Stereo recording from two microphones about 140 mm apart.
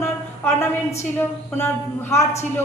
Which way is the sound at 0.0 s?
15° left (ahead or behind).